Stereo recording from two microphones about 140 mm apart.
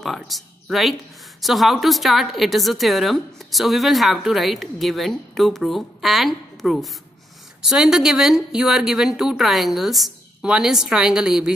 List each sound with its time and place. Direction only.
0.0 s a woman's voice: centre (ahead or behind)